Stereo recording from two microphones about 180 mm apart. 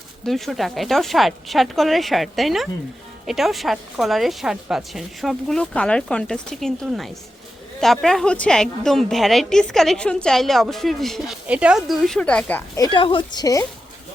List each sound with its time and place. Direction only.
0.3 s a woman's voice: centre (ahead or behind)
12.8 s a woman's voice: 25° left (ahead or behind)